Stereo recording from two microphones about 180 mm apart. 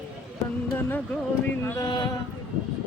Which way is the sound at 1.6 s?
15° left (ahead or behind).